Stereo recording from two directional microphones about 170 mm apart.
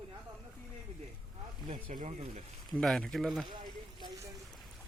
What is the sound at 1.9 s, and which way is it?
Speech, 45° right (ahead or behind).